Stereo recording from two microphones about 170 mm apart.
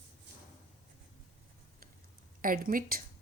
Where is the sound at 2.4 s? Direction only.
55° right (ahead or behind).